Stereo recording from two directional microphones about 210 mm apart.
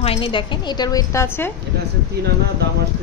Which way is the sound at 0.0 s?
25° left (ahead or behind).